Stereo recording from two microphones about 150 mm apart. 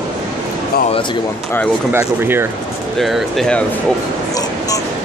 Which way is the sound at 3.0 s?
Centre (ahead or behind).